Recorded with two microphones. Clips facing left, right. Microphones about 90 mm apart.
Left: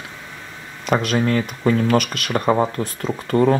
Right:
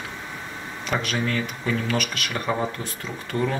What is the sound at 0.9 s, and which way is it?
Speech, 40° left (ahead or behind).